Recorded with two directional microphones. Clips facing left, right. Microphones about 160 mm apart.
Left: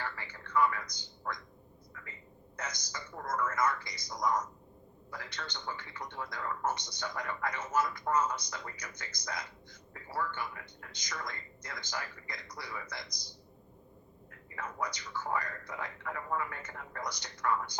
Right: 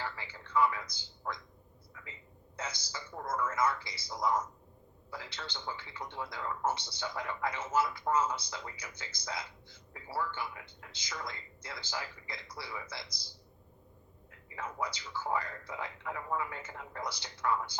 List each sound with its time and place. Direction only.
0.0 s a man's voice: 10° right (ahead or behind)
1.9 s a sound: 15° right (ahead or behind)
2.6 s a man's voice: 10° right (ahead or behind)